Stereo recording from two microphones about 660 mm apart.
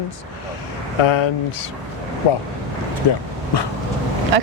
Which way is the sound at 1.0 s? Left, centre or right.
Left.